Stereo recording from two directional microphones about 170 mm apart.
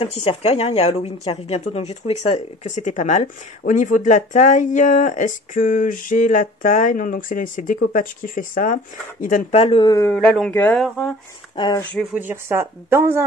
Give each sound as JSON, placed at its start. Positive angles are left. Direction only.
{"t": 0.0, "sound": "speech", "side_deg": 35}
{"t": 10.1, "sound": "a man's voice", "side_deg": 0}
{"t": 11.5, "sound": "speech", "side_deg": 25}
{"t": 12.1, "sound": "speech", "side_deg": -10}